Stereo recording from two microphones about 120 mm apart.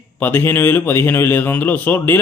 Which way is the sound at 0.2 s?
15° left (ahead or behind).